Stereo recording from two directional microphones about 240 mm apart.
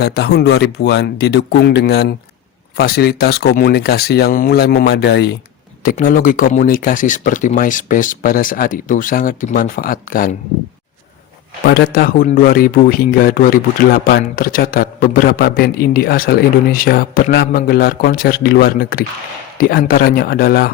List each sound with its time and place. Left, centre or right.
0.0 s a man's voice: left
11.6 s a man's voice: left